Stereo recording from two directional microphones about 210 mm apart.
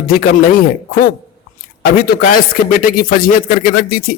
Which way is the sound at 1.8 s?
40° left (ahead or behind).